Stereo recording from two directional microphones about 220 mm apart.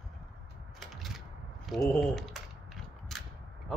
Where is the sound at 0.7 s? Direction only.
Centre (ahead or behind).